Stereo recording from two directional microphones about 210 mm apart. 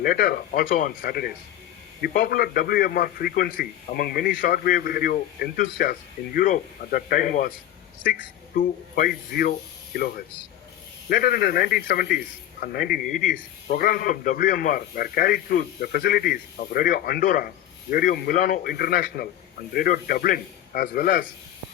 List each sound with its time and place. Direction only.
0.0 s a man's voice: 45° left (ahead or behind)